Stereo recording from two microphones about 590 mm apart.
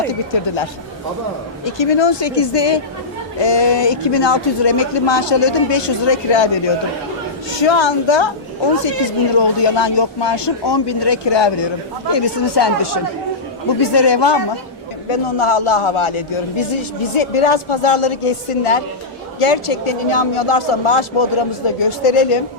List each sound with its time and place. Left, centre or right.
1.6 s speech: left
7.6 s speech: left
9.4 s speech: left
15.1 s a man's voice: left